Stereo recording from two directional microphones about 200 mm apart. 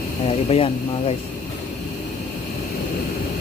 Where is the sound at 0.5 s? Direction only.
30° left (ahead or behind).